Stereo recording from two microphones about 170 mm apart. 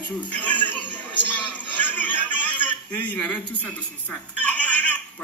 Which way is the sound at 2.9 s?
10° left (ahead or behind).